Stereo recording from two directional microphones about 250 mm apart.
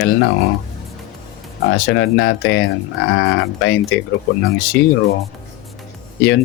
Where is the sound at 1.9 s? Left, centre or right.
Left.